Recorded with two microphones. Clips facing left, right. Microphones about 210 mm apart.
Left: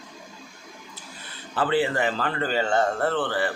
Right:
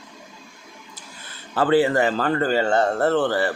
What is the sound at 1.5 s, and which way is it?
Speech, 40° right (ahead or behind).